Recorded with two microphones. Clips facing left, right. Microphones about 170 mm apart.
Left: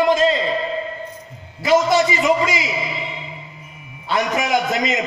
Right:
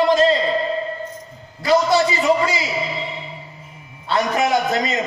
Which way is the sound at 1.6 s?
20° left (ahead or behind).